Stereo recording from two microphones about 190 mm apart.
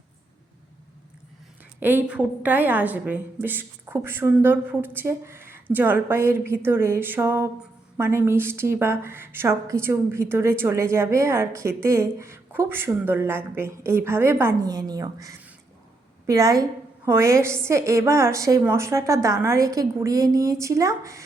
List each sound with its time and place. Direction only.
1.8 s a woman's voice: 10° right (ahead or behind)